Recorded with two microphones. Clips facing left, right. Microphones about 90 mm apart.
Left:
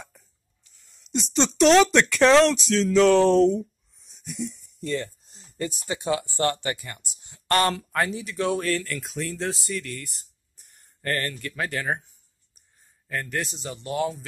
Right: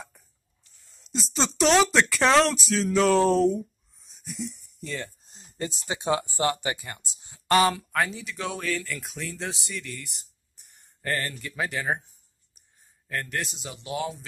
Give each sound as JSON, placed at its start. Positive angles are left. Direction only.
{"t": 1.1, "sound": "speech", "side_deg": 0}
{"t": 5.2, "sound": "speech", "side_deg": -25}
{"t": 7.3, "sound": "speech", "side_deg": -10}
{"t": 13.1, "sound": "speech", "side_deg": 0}